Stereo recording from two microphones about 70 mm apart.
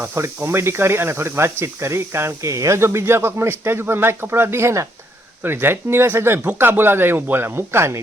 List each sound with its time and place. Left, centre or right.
0.4 s speech: right